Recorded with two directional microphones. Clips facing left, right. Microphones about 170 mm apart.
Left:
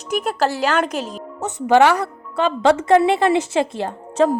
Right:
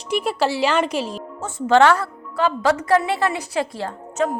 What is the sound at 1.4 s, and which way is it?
A woman's voice, 20° left (ahead or behind).